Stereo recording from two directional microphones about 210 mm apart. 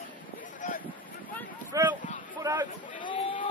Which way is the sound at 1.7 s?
15° right (ahead or behind).